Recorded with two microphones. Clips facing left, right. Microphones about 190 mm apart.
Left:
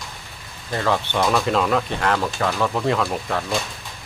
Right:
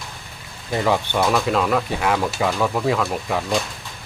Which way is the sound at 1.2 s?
Centre (ahead or behind).